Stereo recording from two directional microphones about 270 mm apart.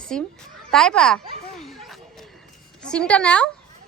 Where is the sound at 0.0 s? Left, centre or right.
Centre.